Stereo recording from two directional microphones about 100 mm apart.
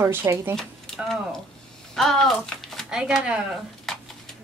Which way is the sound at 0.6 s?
5° left (ahead or behind).